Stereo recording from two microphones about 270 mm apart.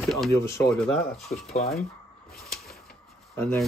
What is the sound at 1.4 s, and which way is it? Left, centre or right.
Speech, left.